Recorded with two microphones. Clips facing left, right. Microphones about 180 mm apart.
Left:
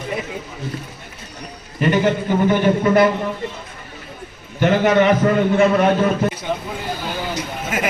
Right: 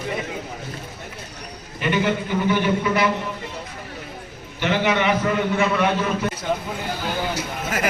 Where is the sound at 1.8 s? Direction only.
45° left (ahead or behind).